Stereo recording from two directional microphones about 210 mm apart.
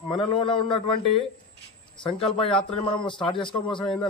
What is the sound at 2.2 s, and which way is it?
A man's voice, 25° left (ahead or behind).